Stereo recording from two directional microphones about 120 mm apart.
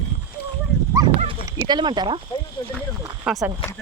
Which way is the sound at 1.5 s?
35° right (ahead or behind).